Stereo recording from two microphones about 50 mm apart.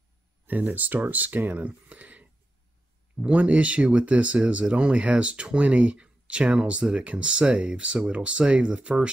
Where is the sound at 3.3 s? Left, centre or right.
Right.